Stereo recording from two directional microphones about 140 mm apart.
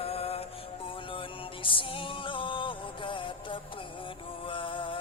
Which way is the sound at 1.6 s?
35° left (ahead or behind).